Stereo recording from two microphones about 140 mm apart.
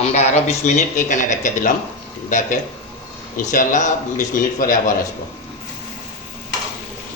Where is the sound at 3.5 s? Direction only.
65° left (ahead or behind).